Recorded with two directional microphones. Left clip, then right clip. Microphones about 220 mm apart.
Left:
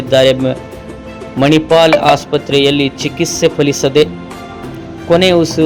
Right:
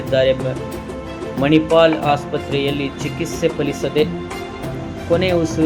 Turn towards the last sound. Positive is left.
turn(degrees=35)  # may be behind; listen again after turning